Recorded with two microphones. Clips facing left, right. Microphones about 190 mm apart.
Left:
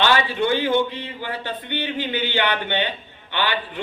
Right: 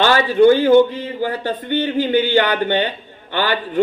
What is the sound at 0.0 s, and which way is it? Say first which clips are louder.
Speech: right 8 dB; 40° right (ahead or behind).